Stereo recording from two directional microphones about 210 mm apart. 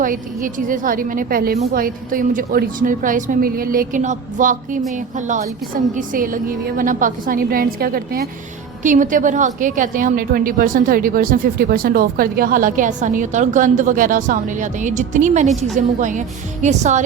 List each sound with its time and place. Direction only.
0.0 s a woman's voice: 40° right (ahead or behind)